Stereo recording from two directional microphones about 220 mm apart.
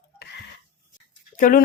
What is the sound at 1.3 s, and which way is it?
Speech, 40° left (ahead or behind).